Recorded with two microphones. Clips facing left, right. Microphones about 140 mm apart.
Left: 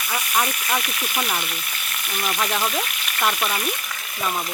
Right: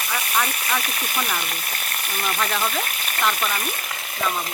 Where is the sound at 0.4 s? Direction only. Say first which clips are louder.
Left 1 dB; 35° right (ahead or behind).